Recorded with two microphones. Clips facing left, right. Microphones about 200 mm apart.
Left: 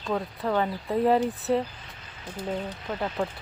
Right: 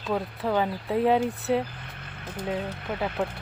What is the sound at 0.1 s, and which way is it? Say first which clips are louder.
Speech: right 1 dB; 5° right (ahead or behind).